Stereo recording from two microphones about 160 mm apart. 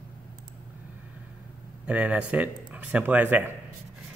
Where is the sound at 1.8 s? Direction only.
10° right (ahead or behind).